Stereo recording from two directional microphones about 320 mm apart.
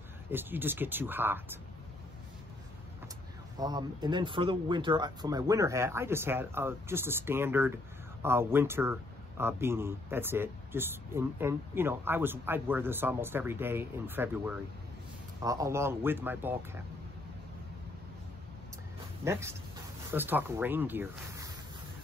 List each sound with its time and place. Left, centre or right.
0.3 s speech: centre
3.5 s speech: centre
19.2 s speech: centre